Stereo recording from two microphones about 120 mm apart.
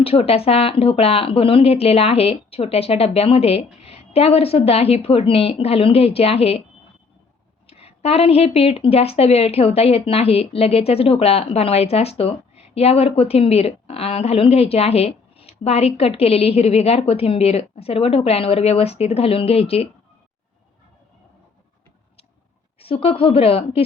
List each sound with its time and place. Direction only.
0.0 s a woman's voice: 55° left (ahead or behind)
7.7 s a woman's voice: 55° left (ahead or behind)
22.8 s speech: 50° left (ahead or behind)